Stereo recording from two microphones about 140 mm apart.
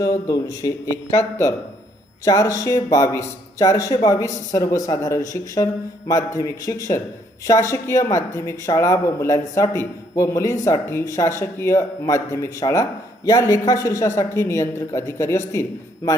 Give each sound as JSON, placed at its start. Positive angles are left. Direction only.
{"t": 0.0, "sound": "a man's voice", "side_deg": 25}